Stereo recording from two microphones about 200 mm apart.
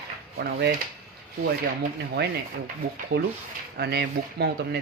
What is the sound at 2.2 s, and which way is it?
Speech, 55° right (ahead or behind).